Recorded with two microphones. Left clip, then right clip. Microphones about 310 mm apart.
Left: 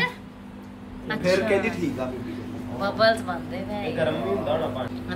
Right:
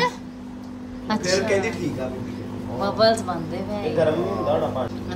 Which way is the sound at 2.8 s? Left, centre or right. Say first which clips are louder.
Right 2 dB; centre.